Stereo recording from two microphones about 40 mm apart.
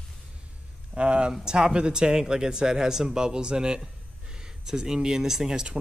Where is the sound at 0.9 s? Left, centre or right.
Right.